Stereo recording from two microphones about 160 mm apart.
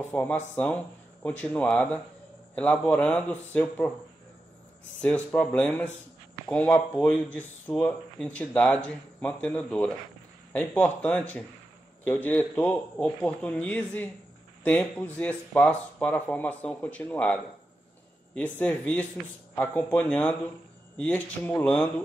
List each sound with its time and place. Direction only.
0.1 s speech: 10° left (ahead or behind)
5.0 s speech: 10° left (ahead or behind)
18.6 s speech: 10° left (ahead or behind)